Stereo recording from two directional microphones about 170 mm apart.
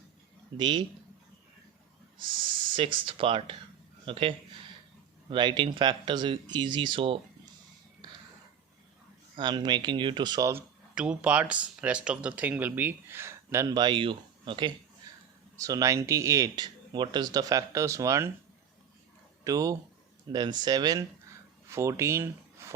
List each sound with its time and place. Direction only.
0.5 s speech: 25° right (ahead or behind)
2.7 s speech: 30° right (ahead or behind)
9.3 s speech: 25° right (ahead or behind)
10.9 s speech: 5° right (ahead or behind); by 14.7 s 30° right (ahead or behind)
15.1 s a sound: 20° right (ahead or behind)
15.5 s speech: 20° right (ahead or behind)
19.5 s speech: 20° right (ahead or behind)